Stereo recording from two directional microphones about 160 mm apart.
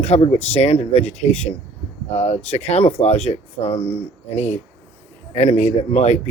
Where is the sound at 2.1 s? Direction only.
45° left (ahead or behind).